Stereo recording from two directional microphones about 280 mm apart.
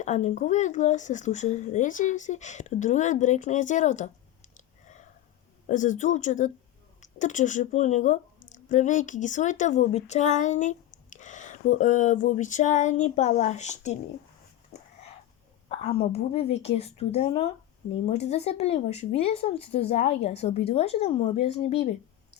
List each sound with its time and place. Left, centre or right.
0.0 s speech: left
5.6 s speech: left
14.7 s a sound: left
15.7 s speech: left